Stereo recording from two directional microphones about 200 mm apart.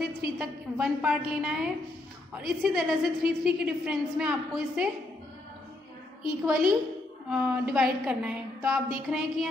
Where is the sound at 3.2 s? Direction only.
50° right (ahead or behind).